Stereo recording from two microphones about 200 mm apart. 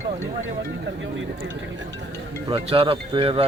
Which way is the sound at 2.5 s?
25° right (ahead or behind).